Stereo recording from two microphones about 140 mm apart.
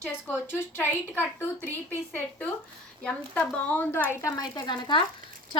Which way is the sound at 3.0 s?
5° left (ahead or behind).